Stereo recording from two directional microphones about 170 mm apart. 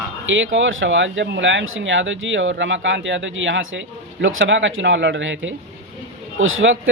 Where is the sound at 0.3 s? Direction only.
90° right.